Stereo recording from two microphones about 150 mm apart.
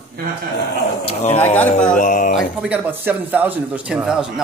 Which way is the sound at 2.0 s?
60° left (ahead or behind).